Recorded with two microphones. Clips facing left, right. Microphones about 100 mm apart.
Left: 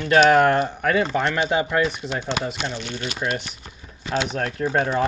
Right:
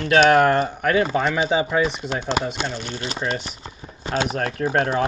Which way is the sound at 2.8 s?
35° right (ahead or behind).